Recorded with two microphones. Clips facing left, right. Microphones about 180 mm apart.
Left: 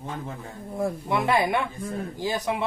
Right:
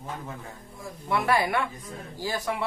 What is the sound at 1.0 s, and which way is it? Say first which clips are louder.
Speech: even; 20° left (ahead or behind).